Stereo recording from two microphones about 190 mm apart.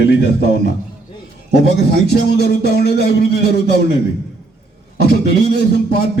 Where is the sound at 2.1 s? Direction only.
60° left (ahead or behind).